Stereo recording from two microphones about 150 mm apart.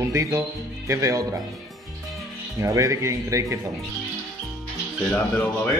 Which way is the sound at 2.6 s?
20° right (ahead or behind).